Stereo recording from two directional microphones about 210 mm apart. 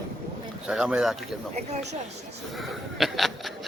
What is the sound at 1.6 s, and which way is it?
Speech, 35° right (ahead or behind).